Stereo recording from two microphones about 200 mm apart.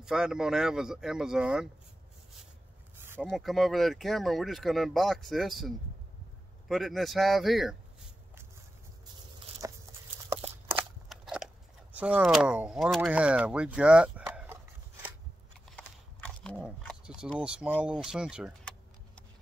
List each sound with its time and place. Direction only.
0.0 s speech: 5° right (ahead or behind)
3.2 s speech: centre (ahead or behind)
9.6 s walk: 15° right (ahead or behind)
11.1 s speech: centre (ahead or behind)
16.4 s a sound: 5° left (ahead or behind)
17.4 s speech: 5° right (ahead or behind)